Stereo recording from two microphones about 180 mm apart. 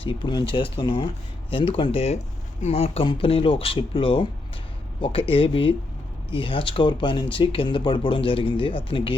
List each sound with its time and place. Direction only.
0.0 s speech: 30° left (ahead or behind)